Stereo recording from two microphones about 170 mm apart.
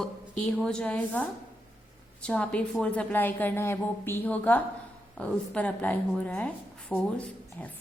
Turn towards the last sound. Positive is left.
turn(degrees=10)  # may be behind; listen again after turning